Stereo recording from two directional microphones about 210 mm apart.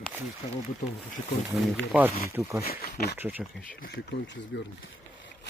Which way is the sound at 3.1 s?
10° right (ahead or behind).